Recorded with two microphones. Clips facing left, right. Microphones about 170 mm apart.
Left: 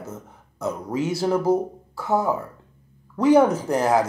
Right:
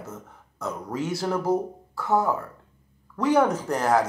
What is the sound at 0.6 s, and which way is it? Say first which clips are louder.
Speech: left 4 dB; 5° left (ahead or behind).